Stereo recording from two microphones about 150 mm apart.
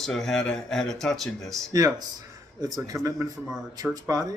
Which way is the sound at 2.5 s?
25° right (ahead or behind).